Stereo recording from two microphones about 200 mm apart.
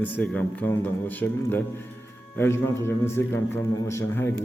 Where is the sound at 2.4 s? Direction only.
10° left (ahead or behind).